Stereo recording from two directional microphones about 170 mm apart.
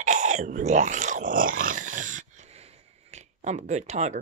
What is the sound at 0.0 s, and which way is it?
Speech, 45° right (ahead or behind).